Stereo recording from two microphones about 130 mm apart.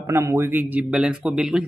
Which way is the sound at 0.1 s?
20° right (ahead or behind).